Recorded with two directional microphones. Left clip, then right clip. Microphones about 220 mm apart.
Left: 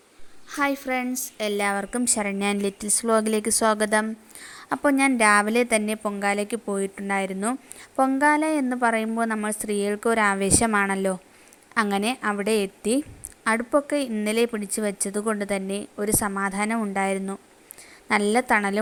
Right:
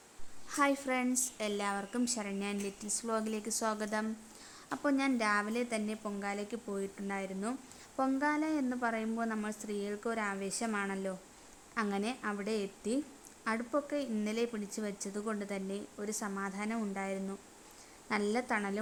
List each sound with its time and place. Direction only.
0.4 s a woman's voice: 15° left (ahead or behind)